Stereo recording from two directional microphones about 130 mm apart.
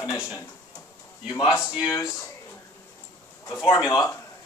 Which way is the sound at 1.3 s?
30° left (ahead or behind).